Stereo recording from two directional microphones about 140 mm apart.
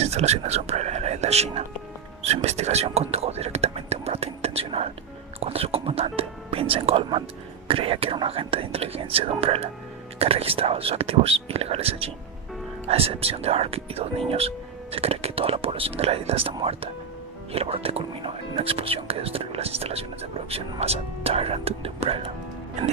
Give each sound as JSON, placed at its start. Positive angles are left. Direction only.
{"t": 0.0, "sound": "speech", "side_deg": -50}